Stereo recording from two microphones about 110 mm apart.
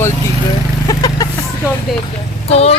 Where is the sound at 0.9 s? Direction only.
35° left (ahead or behind).